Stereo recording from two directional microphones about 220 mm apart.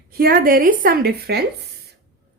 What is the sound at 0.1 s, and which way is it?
A woman's voice, 40° right (ahead or behind).